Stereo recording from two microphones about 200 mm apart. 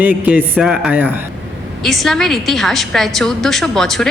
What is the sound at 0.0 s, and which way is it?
A man's voice, 10° right (ahead or behind).